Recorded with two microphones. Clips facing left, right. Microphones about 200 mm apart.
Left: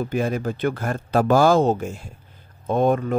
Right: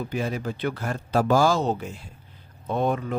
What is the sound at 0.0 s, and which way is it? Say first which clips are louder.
Speech: left 5 dB; 50° left (ahead or behind).